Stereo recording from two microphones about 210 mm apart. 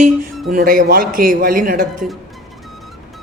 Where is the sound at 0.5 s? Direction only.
40° right (ahead or behind).